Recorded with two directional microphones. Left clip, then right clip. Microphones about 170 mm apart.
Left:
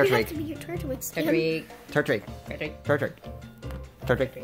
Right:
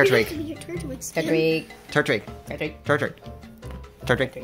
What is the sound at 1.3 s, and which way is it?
Speech, 45° right (ahead or behind).